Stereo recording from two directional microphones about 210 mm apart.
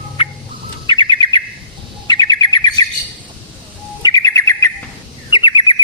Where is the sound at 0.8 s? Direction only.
25° left (ahead or behind).